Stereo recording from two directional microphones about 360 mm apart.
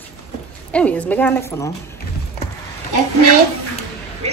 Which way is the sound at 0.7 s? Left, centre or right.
Centre.